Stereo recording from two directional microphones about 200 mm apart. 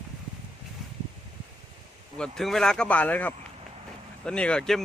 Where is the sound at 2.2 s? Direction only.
Centre (ahead or behind).